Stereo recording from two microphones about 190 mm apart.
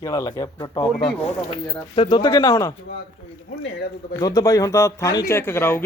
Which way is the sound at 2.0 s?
25° left (ahead or behind).